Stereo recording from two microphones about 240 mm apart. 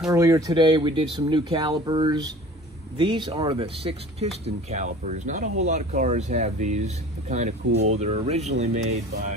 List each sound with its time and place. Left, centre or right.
0.1 s speech: centre; by 9.0 s right